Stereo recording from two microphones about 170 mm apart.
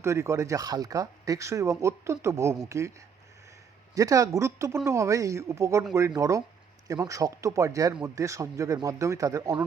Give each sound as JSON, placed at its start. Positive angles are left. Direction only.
{"t": 0.0, "sound": "speech", "side_deg": -15}
{"t": 3.9, "sound": "speech", "side_deg": -20}